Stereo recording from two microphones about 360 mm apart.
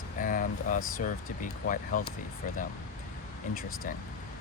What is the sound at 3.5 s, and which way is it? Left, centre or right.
Speech, left.